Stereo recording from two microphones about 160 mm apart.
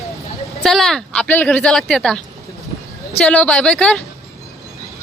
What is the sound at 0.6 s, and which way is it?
Speech, centre (ahead or behind).